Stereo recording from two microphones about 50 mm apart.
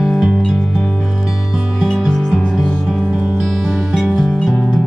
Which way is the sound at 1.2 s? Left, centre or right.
Centre.